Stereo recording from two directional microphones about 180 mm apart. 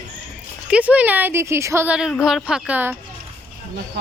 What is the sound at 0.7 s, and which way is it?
A woman's voice, 10° right (ahead or behind).